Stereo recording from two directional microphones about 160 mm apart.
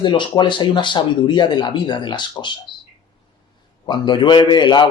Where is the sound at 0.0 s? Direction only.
30° left (ahead or behind).